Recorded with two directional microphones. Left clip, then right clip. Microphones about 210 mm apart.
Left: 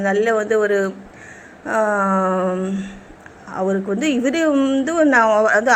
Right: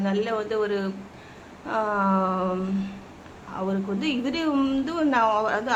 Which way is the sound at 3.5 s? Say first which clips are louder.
Left 8 dB; 20° left (ahead or behind).